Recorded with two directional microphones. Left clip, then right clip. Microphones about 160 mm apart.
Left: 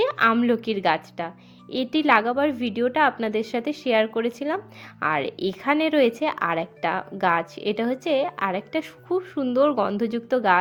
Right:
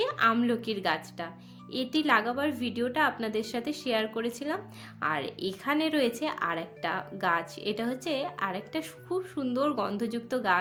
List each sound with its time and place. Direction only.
0.0 s a woman's voice: 45° left (ahead or behind)